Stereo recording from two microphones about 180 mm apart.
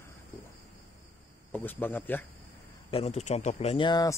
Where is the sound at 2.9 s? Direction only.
35° left (ahead or behind).